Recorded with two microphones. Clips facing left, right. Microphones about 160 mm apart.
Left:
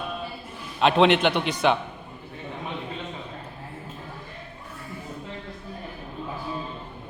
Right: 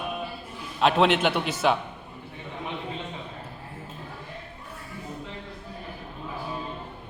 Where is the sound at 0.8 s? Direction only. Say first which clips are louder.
Left 2 dB; centre (ahead or behind).